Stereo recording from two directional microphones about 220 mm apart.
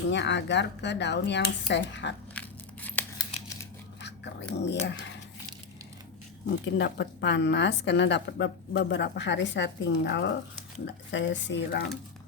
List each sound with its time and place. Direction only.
0.1 s a woman's voice: 50° left (ahead or behind)
2.3 s scissors: 5° left (ahead or behind)
4.0 s speech: 50° left (ahead or behind)
6.7 s a woman's voice: 50° left (ahead or behind)